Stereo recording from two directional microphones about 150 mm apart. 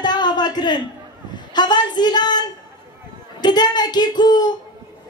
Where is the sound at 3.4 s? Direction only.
30° left (ahead or behind).